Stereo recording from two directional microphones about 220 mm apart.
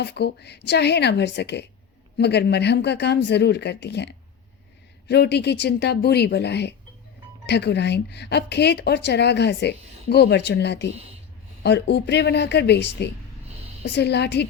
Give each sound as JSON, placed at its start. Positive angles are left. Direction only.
{"t": 0.0, "sound": "a woman's voice", "side_deg": 50}